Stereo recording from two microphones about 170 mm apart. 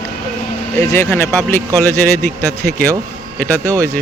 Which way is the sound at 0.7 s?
15° left (ahead or behind).